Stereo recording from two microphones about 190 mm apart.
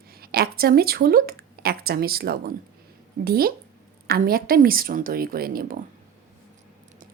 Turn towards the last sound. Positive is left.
turn(degrees=-50)  # may be behind; listen again after turning